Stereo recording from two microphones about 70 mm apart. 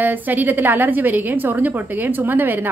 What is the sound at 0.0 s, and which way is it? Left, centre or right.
A woman's voice, right.